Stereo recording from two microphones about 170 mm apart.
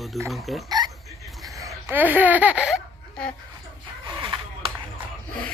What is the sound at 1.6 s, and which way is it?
Speech, 15° right (ahead or behind).